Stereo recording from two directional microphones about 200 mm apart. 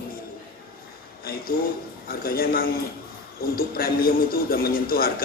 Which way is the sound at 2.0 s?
50° left (ahead or behind).